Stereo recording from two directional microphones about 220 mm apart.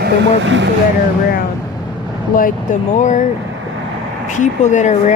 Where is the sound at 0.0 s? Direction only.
55° right (ahead or behind).